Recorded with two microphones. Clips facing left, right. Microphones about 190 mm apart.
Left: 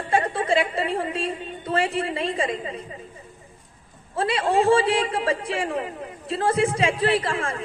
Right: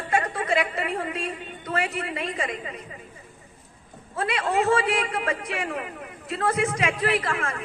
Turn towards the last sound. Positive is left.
turn(degrees=30)  # may be behind; listen again after turning